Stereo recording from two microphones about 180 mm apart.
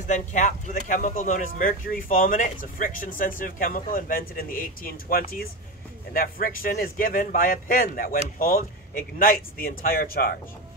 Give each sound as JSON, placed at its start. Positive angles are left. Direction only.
{"t": 0.0, "sound": "speech", "side_deg": 45}